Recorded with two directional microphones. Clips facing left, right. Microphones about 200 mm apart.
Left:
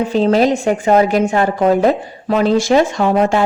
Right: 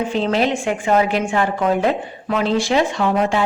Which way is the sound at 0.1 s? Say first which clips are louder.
Left 6 dB; 40° left (ahead or behind).